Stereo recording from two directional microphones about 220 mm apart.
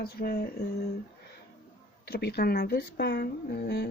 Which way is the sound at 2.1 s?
45° left (ahead or behind).